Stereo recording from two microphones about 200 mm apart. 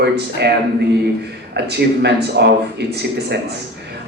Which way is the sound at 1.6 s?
55° right (ahead or behind).